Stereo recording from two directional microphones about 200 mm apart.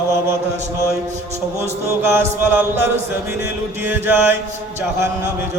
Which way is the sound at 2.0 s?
10° right (ahead or behind).